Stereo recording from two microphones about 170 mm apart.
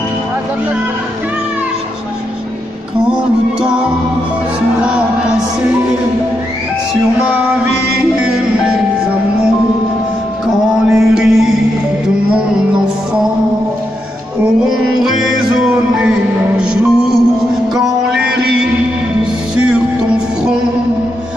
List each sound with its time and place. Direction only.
4.7 s music: 5° right (ahead or behind)
6.9 s music: 5° right (ahead or behind)
10.9 s music: centre (ahead or behind)
14.6 s music: 5° right (ahead or behind)